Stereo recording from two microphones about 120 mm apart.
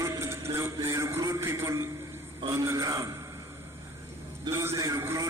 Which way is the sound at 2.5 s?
25° right (ahead or behind).